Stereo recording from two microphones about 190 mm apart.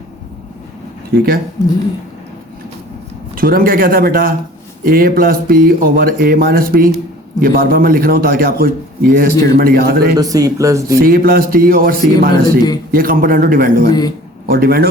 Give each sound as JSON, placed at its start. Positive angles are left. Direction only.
{"t": 1.1, "sound": "speech", "side_deg": -55}
{"t": 1.6, "sound": "speech", "side_deg": 20}
{"t": 3.3, "sound": "speech", "side_deg": -50}
{"t": 10.2, "sound": "speech", "side_deg": -20}
{"t": 11.0, "sound": "speech", "side_deg": -50}